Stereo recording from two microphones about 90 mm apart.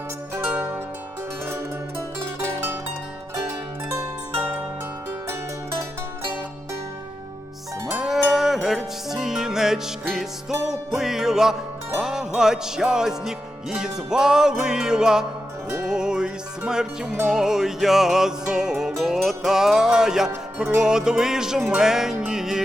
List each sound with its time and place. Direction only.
0.3 s zither: 25° right (ahead or behind)
2.4 s music: 25° right (ahead or behind)
3.8 s pizzicato: 30° right (ahead or behind)
7.9 s livestock: 5° right (ahead or behind)
11.9 s music: 5° right (ahead or behind)